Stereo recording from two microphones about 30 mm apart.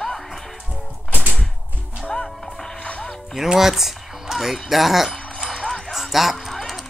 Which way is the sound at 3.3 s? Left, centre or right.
Centre.